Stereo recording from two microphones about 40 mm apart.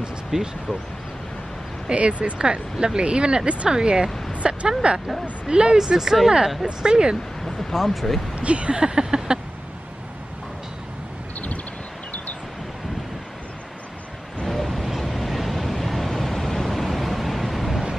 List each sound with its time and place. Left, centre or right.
0.3 s speech: centre
1.9 s speech: right
7.7 s speech: centre
8.4 s a sound: right
14.4 s a sound: centre
15.0 s vehicle: centre